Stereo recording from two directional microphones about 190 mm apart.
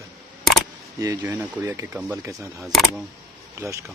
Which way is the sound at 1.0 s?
15° right (ahead or behind).